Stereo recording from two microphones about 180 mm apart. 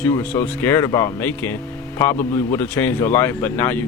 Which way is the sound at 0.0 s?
10° left (ahead or behind).